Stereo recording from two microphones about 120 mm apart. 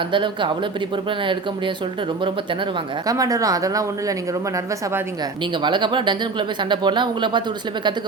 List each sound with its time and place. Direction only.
0.1 s speech: 45° right (ahead or behind)
3.1 s speech: 30° right (ahead or behind)
5.6 s speech: 40° right (ahead or behind)